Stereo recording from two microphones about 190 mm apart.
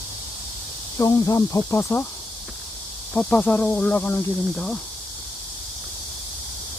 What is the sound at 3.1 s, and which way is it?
Speech, 10° left (ahead or behind).